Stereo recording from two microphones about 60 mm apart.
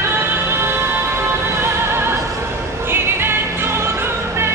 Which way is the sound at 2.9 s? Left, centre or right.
Right.